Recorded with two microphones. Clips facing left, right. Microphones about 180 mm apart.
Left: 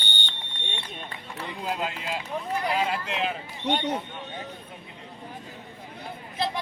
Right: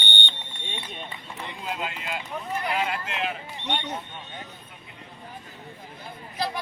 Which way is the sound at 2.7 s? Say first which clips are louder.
Left 1 dB; 35° left (ahead or behind).